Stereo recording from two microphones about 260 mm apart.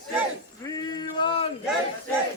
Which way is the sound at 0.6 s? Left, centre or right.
Centre.